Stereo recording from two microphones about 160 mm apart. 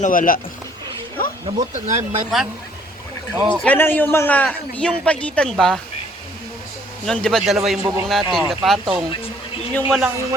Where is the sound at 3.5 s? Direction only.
10° left (ahead or behind).